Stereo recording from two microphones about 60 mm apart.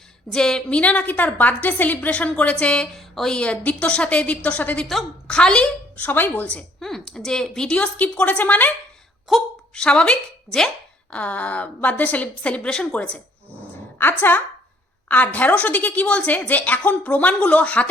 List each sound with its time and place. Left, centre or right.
0.3 s a woman's voice: centre
2.9 s a woman's voice: centre
3.3 s a woman's voice: centre
6.0 s a woman's voice: left
6.7 s a sound: centre
7.3 s speech: centre
7.8 s a woman's voice: left
9.3 s a woman's voice: centre
9.7 s speech: centre
11.1 s a woman's voice: left
12.9 s a woman's voice: left
14.0 s a woman's voice: left